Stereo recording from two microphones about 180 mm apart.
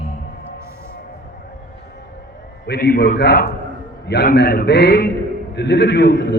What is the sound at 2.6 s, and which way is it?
A man's voice, 65° left (ahead or behind).